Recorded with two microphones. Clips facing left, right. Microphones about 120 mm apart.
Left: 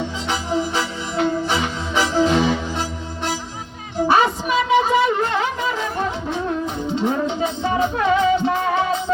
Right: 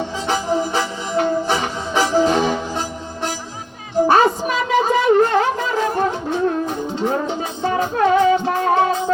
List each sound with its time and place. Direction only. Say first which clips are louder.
0.3 s music: right 3 dB; 45° right (ahead or behind)
4.1 s music: even; 50° right (ahead or behind)